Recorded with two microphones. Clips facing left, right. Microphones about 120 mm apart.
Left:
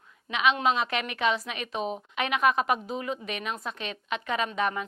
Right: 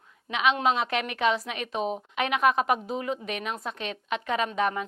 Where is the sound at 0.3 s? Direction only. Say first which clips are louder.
Right 1 dB; 55° right (ahead or behind).